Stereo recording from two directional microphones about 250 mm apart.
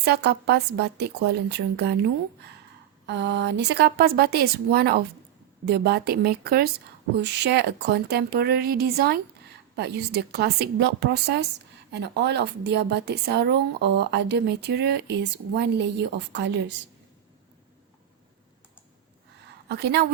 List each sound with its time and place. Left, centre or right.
0.0 s a woman's voice: right
3.1 s a woman's voice: right
19.6 s a woman's voice: right